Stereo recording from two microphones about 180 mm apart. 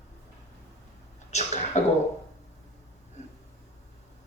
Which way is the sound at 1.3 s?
40° left (ahead or behind).